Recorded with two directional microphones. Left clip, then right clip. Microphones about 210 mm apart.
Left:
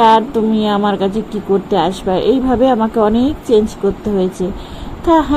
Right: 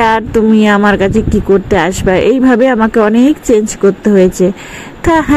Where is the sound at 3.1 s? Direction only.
20° right (ahead or behind).